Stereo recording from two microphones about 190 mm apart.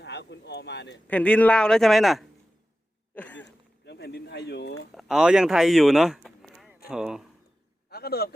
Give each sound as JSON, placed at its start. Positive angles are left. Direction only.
{"t": 0.0, "sound": "speech", "side_deg": 65}
{"t": 1.0, "sound": "speech", "side_deg": 5}
{"t": 3.2, "sound": "a sound", "side_deg": 10}
{"t": 3.8, "sound": "speech", "side_deg": 60}
{"t": 4.9, "sound": "a man's voice", "side_deg": -5}
{"t": 7.9, "sound": "a man's voice", "side_deg": 55}